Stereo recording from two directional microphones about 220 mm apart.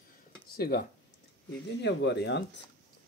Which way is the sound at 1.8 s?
50° left (ahead or behind).